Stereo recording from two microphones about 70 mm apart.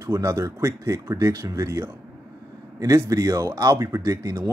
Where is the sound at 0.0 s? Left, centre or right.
Right.